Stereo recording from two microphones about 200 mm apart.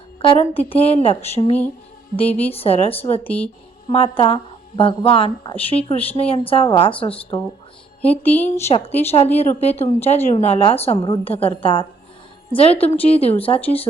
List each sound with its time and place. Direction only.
0.2 s a woman's voice: 30° left (ahead or behind)